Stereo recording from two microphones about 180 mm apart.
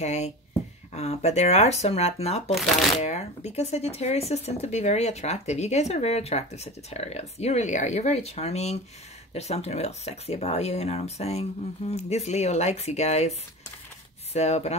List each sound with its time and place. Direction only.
0.0 s speech: 40° left (ahead or behind)